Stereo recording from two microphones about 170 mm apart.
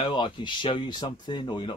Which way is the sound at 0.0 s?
25° left (ahead or behind).